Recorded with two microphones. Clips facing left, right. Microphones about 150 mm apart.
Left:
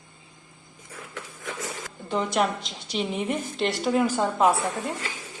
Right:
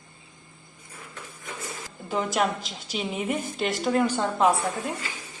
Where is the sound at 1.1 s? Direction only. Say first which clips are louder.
Left 3 dB; 90° left.